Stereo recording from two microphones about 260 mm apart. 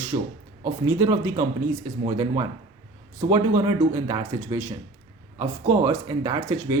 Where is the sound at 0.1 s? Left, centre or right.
Right.